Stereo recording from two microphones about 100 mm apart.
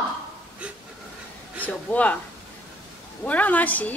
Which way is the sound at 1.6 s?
15° left (ahead or behind).